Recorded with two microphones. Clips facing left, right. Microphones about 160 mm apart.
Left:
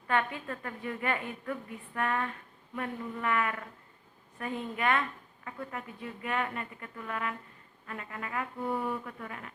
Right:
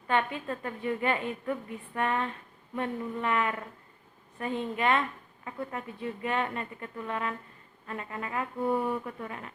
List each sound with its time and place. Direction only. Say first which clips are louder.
0.1 s speech: right 2 dB; 25° right (ahead or behind)